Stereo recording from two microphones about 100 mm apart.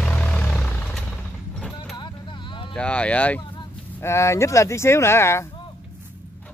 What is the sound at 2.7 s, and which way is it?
Speech, 10° left (ahead or behind).